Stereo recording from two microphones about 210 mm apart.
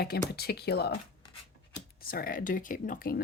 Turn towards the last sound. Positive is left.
turn(degrees=40)  # may be behind; listen again after turning